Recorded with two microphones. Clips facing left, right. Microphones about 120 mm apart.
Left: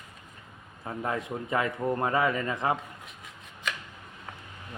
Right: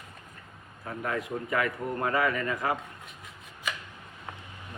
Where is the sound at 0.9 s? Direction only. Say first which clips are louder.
Left 1 dB; 25° left (ahead or behind).